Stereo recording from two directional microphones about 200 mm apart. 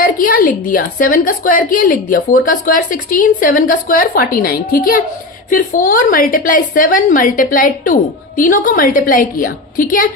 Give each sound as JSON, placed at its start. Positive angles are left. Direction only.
{"t": 0.0, "sound": "a woman's voice", "side_deg": 45}